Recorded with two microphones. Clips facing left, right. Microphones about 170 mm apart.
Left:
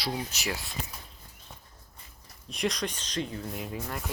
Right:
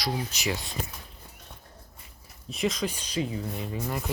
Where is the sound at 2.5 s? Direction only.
Centre (ahead or behind).